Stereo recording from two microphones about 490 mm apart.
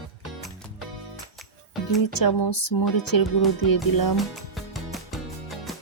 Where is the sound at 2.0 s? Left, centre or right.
Left.